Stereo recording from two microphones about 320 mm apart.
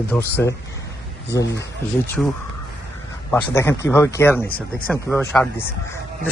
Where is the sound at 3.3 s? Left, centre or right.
Centre.